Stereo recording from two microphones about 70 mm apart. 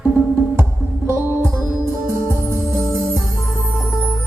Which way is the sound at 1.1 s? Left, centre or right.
Right.